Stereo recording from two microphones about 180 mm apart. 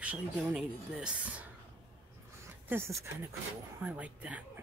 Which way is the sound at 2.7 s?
15° right (ahead or behind).